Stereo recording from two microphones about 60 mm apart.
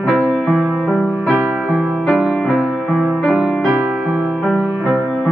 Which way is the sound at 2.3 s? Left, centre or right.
Centre.